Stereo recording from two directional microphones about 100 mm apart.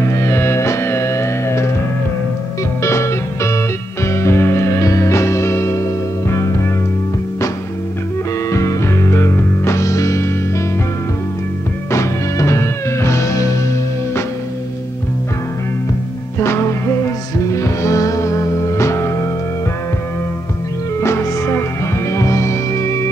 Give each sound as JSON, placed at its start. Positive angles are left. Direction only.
{"t": 0.0, "sound": "music", "side_deg": 30}
{"t": 2.8, "sound": "music", "side_deg": 30}
{"t": 8.5, "sound": "music", "side_deg": 30}
{"t": 11.9, "sound": "music", "side_deg": 30}
{"t": 17.5, "sound": "music", "side_deg": 30}
{"t": 21.0, "sound": "music", "side_deg": 25}